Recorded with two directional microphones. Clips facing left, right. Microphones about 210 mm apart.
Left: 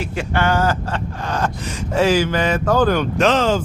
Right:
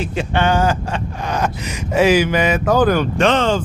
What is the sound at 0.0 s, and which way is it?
Speech, 20° right (ahead or behind).